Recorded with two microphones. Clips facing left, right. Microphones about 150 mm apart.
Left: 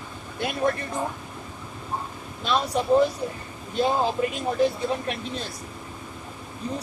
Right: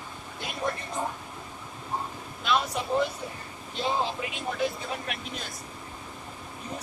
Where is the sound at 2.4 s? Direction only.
35° left (ahead or behind).